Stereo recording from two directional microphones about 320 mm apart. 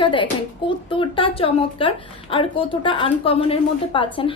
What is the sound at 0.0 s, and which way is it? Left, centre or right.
Speech, centre.